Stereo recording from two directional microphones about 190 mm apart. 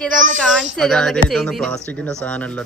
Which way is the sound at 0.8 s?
5° left (ahead or behind).